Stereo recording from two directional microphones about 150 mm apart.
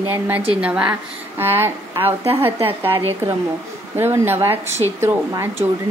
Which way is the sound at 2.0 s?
40° right (ahead or behind).